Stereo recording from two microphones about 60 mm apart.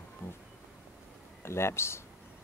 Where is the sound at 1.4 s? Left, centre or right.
Left.